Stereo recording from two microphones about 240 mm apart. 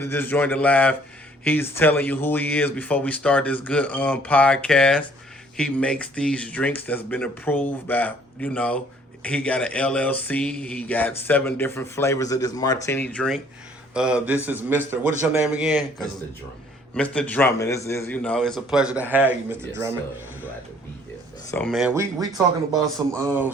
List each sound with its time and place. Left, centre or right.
0.0 s a man's voice: centre
21.5 s a man's voice: centre